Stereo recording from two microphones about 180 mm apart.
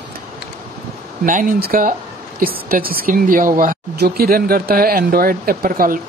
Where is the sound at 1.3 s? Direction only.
50° right (ahead or behind).